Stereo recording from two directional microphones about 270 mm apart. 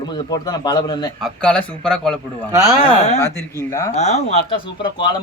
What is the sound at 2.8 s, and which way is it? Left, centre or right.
Speech, left.